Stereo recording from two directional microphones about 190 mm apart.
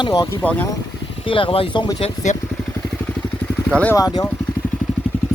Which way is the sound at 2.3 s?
40° left (ahead or behind).